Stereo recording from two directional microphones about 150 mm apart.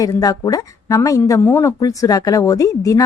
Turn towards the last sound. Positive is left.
turn(degrees=20)  # may be behind; listen again after turning